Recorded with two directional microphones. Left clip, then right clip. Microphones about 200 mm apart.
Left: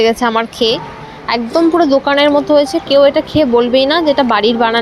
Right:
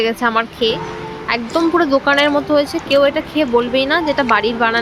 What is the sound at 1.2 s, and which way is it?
Speech, 15° left (ahead or behind).